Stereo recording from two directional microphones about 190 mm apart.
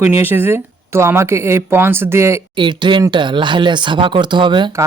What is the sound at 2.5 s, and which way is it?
Speech, 25° right (ahead or behind).